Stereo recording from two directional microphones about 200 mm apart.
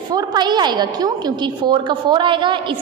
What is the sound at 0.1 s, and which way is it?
A woman's voice, 20° right (ahead or behind).